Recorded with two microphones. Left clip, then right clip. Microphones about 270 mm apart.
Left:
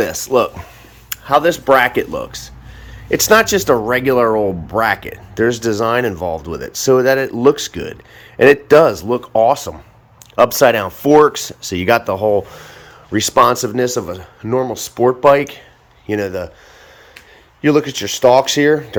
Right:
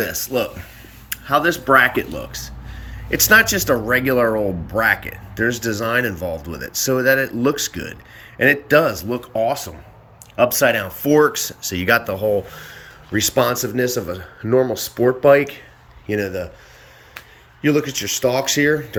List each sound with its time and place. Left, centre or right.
0.0 s speech: centre
17.6 s speech: centre